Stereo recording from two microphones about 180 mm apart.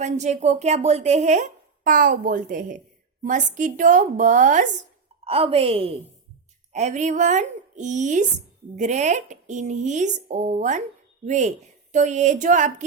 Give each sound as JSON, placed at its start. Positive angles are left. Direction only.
{"t": 0.0, "sound": "a woman's voice", "side_deg": -40}
{"t": 5.2, "sound": "a woman's voice", "side_deg": -30}